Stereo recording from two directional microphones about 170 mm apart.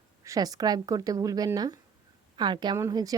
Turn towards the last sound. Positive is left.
turn(degrees=-20)  # may be behind; listen again after turning